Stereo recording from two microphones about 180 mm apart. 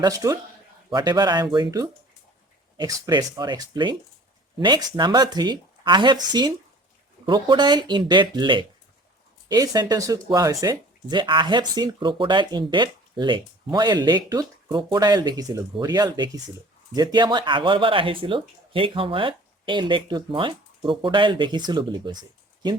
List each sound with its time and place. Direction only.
0.0 s speech: 20° right (ahead or behind)
4.9 s speech: 25° right (ahead or behind)